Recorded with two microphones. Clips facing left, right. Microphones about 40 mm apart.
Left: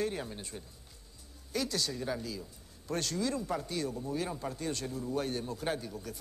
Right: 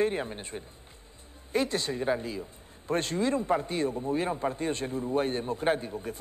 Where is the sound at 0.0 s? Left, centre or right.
Right.